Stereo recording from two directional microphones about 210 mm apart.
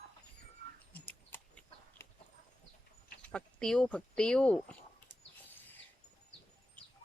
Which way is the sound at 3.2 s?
5° left (ahead or behind).